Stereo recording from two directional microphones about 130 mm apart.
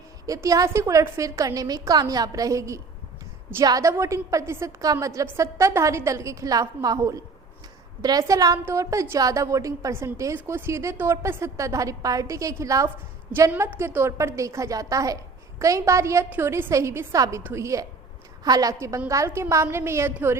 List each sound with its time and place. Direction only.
0.3 s a woman's voice: 25° right (ahead or behind)